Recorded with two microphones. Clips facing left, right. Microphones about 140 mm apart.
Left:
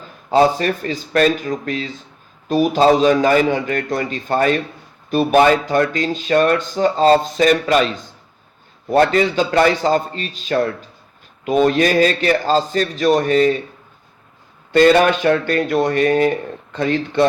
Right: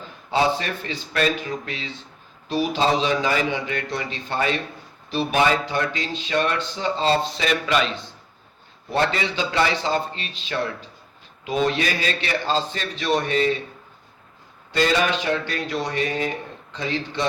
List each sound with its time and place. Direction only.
0.3 s speech: 45° left (ahead or behind)
14.7 s speech: 55° left (ahead or behind)